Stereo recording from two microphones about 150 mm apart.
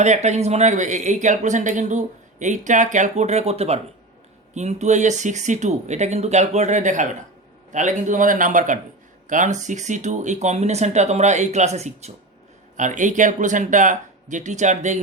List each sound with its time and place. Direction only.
0.0 s speech: 50° right (ahead or behind)